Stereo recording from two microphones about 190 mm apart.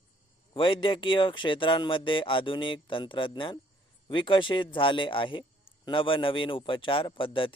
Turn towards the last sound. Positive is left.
turn(degrees=25)  # may be behind; listen again after turning